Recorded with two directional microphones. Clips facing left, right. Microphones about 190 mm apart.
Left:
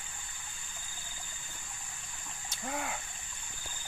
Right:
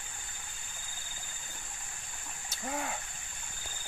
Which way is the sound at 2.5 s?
Centre (ahead or behind).